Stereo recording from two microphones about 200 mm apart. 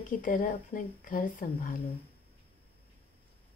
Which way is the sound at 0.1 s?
45° left (ahead or behind).